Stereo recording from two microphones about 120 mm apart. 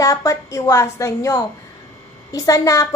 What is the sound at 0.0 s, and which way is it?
A woman's voice, 25° left (ahead or behind).